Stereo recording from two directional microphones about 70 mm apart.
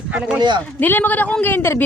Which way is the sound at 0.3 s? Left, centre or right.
Right.